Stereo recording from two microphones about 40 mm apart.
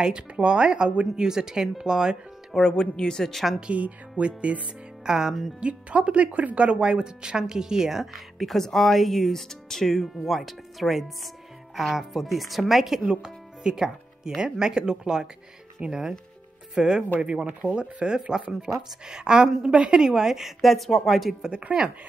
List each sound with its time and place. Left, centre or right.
0.0 s speech: right
2.7 s speech: centre
3.7 s speech: right
5.0 s speech: centre
5.6 s speech: right; by 8.1 s centre
8.1 s speech: centre
13.2 s music: centre
14.4 s speech: centre
20.0 s speech: centre
21.5 s speech: right